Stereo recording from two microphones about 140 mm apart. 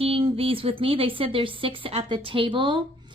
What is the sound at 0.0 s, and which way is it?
Speech, 40° right (ahead or behind).